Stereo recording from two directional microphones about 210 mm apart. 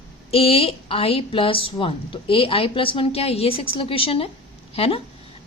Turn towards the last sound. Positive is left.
turn(degrees=25)  # may be behind; listen again after turning